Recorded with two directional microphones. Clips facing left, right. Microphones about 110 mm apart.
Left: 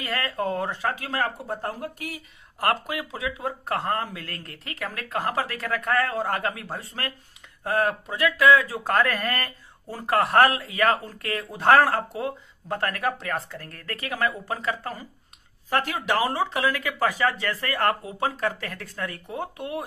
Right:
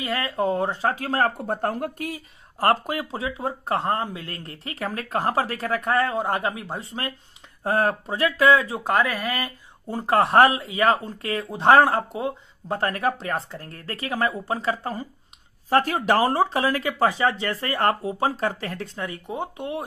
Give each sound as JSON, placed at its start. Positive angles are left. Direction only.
{"t": 0.0, "sound": "speech", "side_deg": -20}
{"t": 1.6, "sound": "speech", "side_deg": -60}
{"t": 2.0, "sound": "speech", "side_deg": -40}
{"t": 9.8, "sound": "speech", "side_deg": -25}
{"t": 15.7, "sound": "speech", "side_deg": -40}
{"t": 16.5, "sound": "speech", "side_deg": -25}